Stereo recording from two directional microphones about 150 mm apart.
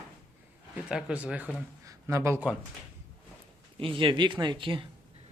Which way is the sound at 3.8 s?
35° right (ahead or behind).